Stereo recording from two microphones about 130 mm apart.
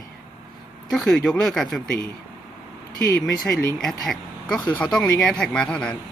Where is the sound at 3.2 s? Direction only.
Centre (ahead or behind).